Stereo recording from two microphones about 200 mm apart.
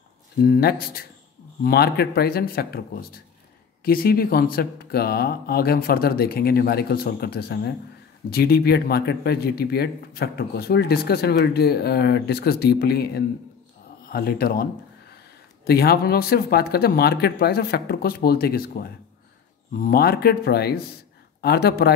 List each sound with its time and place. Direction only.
0.4 s speech: 50° left (ahead or behind)